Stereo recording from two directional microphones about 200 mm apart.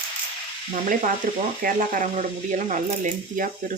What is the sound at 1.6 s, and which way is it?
Speech, 40° right (ahead or behind).